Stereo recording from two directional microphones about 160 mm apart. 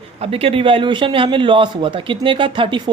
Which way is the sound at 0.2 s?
35° right (ahead or behind).